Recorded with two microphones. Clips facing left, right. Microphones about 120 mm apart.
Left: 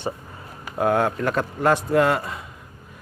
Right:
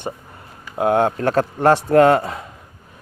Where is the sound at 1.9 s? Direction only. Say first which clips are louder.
Right 6 dB; 55° right (ahead or behind).